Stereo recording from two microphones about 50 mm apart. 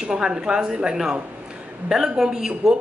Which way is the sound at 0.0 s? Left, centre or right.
Centre.